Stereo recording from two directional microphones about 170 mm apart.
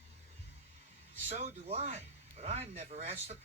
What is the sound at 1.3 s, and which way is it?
Speech, 40° right (ahead or behind).